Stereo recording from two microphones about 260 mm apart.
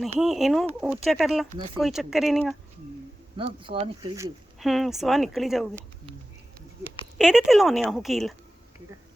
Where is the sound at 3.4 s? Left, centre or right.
Centre.